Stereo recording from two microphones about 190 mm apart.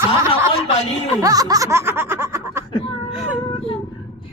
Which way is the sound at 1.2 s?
20° right (ahead or behind).